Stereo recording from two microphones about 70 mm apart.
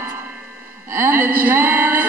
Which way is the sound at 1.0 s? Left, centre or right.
Right.